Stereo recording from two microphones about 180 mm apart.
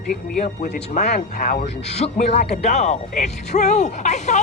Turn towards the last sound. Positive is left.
turn(degrees=40)  # may be behind; listen again after turning